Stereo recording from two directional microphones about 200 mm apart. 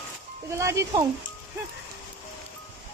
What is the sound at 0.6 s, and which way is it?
Speech, 15° right (ahead or behind).